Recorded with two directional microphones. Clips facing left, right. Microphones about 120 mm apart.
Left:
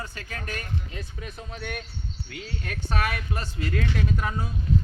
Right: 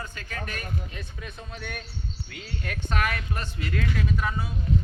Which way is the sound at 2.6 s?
30° left (ahead or behind).